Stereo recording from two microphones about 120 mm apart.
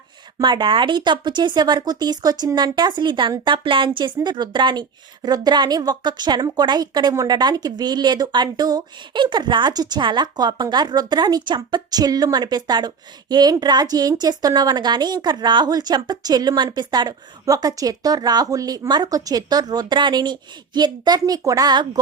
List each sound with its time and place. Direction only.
0.4 s a woman's voice: 40° right (ahead or behind)